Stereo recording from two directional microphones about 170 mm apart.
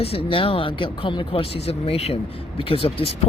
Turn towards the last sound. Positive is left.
turn(degrees=35)  # may be behind; listen again after turning